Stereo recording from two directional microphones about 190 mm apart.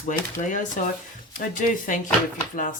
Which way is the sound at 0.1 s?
40° left (ahead or behind).